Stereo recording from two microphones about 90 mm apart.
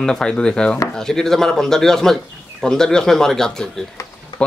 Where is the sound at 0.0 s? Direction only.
5° left (ahead or behind).